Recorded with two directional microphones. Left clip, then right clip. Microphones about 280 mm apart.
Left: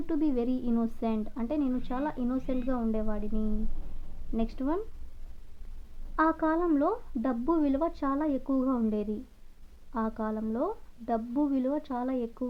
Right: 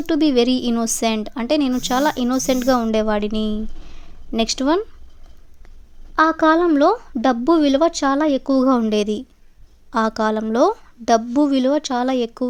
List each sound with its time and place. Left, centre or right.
0.0 s speech: right
6.1 s speech: right